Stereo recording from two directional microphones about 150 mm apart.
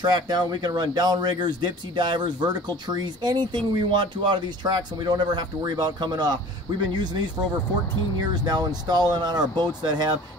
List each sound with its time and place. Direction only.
0.0 s speech: 30° right (ahead or behind)
8.3 s speech: 30° right (ahead or behind)